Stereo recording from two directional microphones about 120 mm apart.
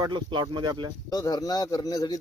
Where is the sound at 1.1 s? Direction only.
30° left (ahead or behind).